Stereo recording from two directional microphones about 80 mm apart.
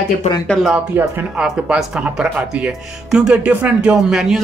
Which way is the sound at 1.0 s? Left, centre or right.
Right.